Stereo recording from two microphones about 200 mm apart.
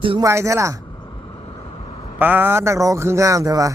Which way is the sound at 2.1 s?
10° right (ahead or behind).